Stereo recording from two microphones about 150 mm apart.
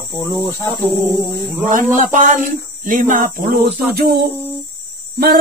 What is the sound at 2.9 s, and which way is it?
Speech, 65° right (ahead or behind).